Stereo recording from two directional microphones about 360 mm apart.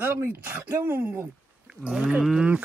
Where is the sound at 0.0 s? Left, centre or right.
Centre.